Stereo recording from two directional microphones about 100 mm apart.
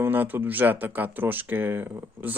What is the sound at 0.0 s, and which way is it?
Speech, 20° right (ahead or behind).